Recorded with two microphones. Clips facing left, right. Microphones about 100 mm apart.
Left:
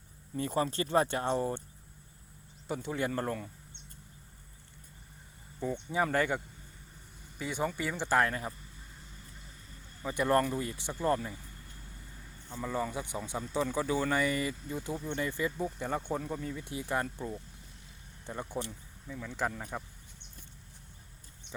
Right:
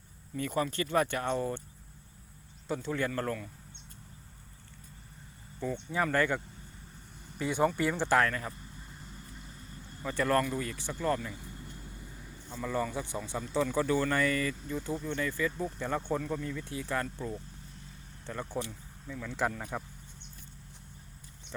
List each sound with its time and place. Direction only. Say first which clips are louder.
0.3 s speech: even; 30° left (ahead or behind)
2.6 s speech: right 1 dB; 15° left (ahead or behind)
3.1 s speech: even; 25° left (ahead or behind)
5.7 s speech: even; 20° left (ahead or behind)
7.3 s speech: right 5 dB; centre (ahead or behind)
7.6 s speech: right 5 dB; 50° right (ahead or behind)
8.3 s speech: even; 20° left (ahead or behind)
10.0 s speech: left 1 dB; 15° left (ahead or behind)
11.5 s vehicle: right 6 dB; 20° right (ahead or behind)
12.5 s speech: right 1 dB; 10° left (ahead or behind)
15.6 s speech: right 1 dB; 10° left (ahead or behind)
18.3 s speech: right 1 dB; 15° left (ahead or behind)